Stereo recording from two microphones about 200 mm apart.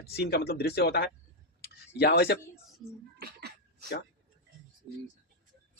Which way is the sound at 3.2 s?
55° right (ahead or behind).